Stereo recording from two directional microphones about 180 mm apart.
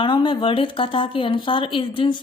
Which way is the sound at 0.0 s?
25° left (ahead or behind).